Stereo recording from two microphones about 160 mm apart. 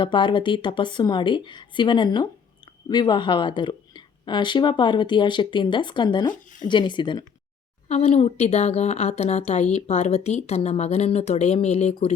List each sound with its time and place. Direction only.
0.0 s a woman's voice: 30° left (ahead or behind)
7.9 s a woman's voice: 40° left (ahead or behind)